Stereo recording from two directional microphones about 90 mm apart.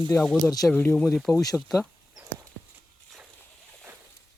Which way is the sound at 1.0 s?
Centre (ahead or behind).